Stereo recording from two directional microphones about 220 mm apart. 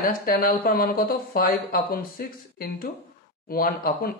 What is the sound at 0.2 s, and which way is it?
Speech, 40° left (ahead or behind).